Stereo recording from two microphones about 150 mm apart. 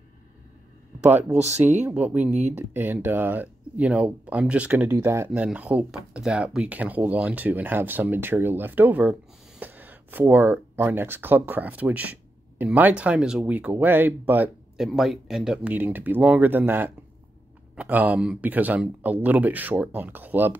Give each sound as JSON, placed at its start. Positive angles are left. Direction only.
{"t": 1.0, "sound": "speech", "side_deg": -10}
{"t": 14.9, "sound": "speech", "side_deg": 0}